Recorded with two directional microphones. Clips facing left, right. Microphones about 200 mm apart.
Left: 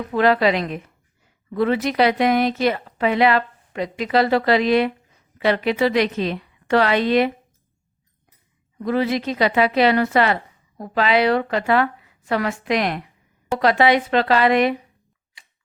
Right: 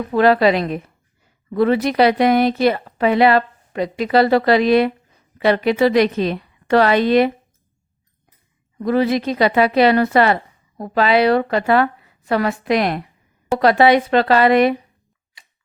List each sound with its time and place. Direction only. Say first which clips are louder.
0.1 s speech: right 3 dB; 35° right (ahead or behind)
8.8 s speech: right 4 dB; 40° right (ahead or behind)